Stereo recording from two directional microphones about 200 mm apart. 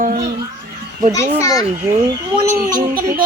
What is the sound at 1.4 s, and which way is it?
Speech, 20° left (ahead or behind).